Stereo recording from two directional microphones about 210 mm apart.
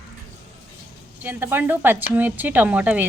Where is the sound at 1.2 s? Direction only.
10° right (ahead or behind).